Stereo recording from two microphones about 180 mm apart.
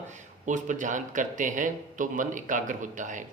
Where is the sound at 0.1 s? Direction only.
45° right (ahead or behind).